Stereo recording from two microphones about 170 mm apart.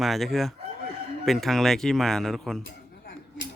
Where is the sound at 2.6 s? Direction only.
85° left.